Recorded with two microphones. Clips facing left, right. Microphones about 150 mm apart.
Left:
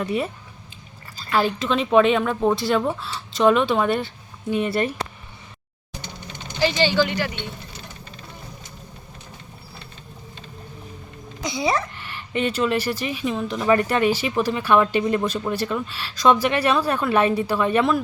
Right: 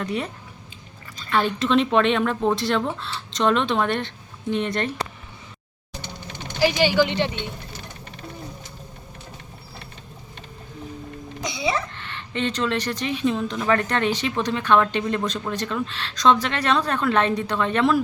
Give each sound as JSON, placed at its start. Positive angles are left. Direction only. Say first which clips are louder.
{"t": 0.0, "sound": "speech", "louder": "left 3 dB", "side_deg": 5}
{"t": 1.3, "sound": "speech", "louder": "right 1 dB", "side_deg": 5}
{"t": 6.6, "sound": "speech", "louder": "right 1 dB", "side_deg": -10}
{"t": 11.5, "sound": "a sound", "louder": "left 3 dB", "side_deg": 45}
{"t": 11.9, "sound": "speech", "louder": "left 2 dB", "side_deg": 10}